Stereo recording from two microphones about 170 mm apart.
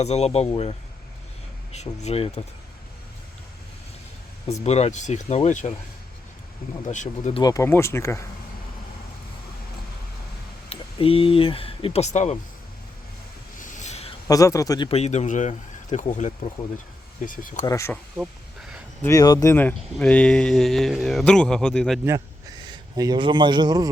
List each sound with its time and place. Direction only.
0.0 s speech: 40° left (ahead or behind)
4.6 s speech: 40° left (ahead or behind)
6.9 s speech: 45° left (ahead or behind)
7.3 s speech: 20° left (ahead or behind)
10.7 s speech: 35° left (ahead or behind)
13.6 s a sound: 45° left (ahead or behind)
14.3 s a man's voice: 20° left (ahead or behind)
14.8 s speech: 40° left (ahead or behind)
17.7 s speech: 15° left (ahead or behind)
18.2 s a sound: 5° right (ahead or behind)
19.0 s speech: 20° left (ahead or behind); by 22.0 s 5° left (ahead or behind)
22.0 s a man's voice: 20° right (ahead or behind)